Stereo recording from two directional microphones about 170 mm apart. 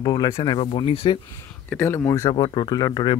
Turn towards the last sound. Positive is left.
turn(degrees=25)  # may be behind; listen again after turning